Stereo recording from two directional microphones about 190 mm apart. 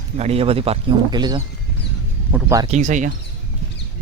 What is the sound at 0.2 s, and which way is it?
Speech, 30° right (ahead or behind).